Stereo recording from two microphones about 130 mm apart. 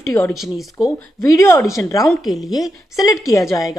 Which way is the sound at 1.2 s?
25° left (ahead or behind).